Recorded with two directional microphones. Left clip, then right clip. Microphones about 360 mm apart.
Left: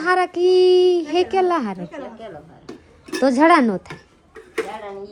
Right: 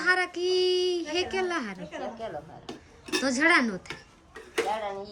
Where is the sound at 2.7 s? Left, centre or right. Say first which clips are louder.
Left 2 dB; centre.